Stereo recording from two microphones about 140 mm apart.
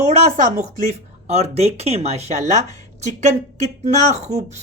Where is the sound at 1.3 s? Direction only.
50° right (ahead or behind).